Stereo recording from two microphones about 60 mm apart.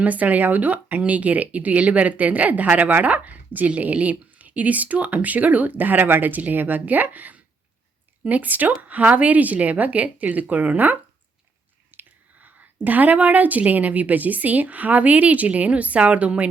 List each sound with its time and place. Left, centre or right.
0.0 s speech: right